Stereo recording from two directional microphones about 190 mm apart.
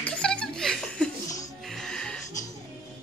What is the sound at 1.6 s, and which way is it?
Music, 5° left (ahead or behind).